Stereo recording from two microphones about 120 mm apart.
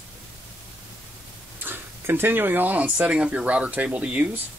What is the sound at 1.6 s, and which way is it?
Speech, 15° right (ahead or behind).